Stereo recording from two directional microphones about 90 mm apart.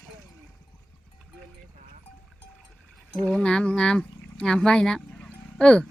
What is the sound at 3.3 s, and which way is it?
Speech, 10° left (ahead or behind).